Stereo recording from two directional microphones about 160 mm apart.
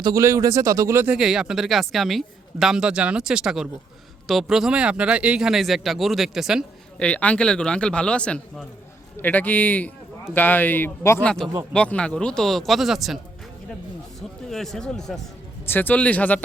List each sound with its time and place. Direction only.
0.0 s speech: 20° right (ahead or behind)
1.1 s speech: 5° right (ahead or behind)
7.0 s speech: 10° left (ahead or behind)
11.3 s speech: 5° left (ahead or behind)
14.2 s speech: centre (ahead or behind)